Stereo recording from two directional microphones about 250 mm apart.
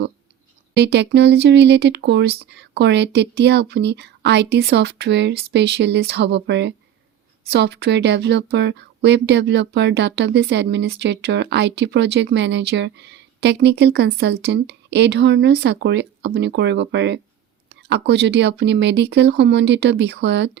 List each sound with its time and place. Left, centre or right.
0.8 s speech: right